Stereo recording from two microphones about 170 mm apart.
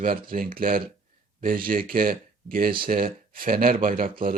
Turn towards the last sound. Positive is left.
turn(degrees=-55)  # may be behind; listen again after turning